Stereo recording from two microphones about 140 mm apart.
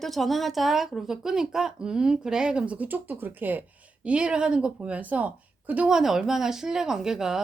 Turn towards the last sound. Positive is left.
turn(degrees=-5)  # may be behind; listen again after turning